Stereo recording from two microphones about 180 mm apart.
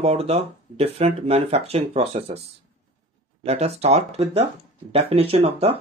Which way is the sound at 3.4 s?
35° right (ahead or behind).